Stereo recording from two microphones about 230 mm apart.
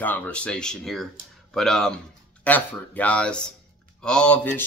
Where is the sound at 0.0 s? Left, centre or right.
Centre.